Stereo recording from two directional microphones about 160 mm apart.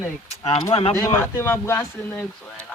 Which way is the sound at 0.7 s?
40° left (ahead or behind).